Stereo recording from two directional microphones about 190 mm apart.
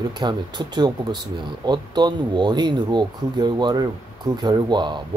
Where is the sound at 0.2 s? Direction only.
25° right (ahead or behind).